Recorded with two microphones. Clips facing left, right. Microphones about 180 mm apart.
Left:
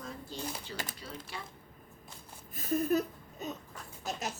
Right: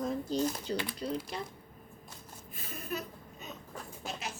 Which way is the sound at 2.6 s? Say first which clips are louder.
Left 11 dB; 40° left (ahead or behind).